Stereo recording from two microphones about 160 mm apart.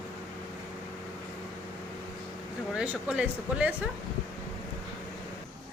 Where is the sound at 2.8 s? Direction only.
5° right (ahead or behind).